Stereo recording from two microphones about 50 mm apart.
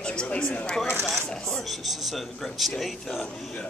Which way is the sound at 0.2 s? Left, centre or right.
Centre.